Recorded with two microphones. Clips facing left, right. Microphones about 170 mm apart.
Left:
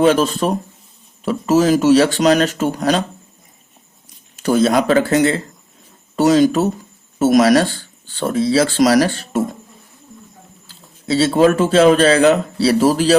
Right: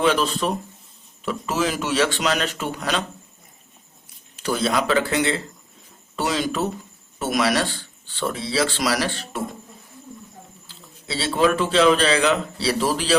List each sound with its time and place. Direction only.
0.0 s speech: 45° left (ahead or behind)
4.4 s speech: 45° left (ahead or behind)
10.7 s speech: 40° left (ahead or behind)